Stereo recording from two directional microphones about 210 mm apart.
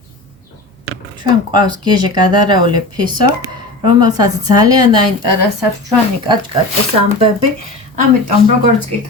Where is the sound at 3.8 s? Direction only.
20° right (ahead or behind).